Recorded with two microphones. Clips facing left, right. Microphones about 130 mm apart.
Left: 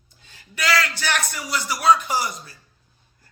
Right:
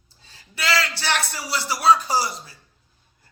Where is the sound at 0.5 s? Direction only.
25° right (ahead or behind).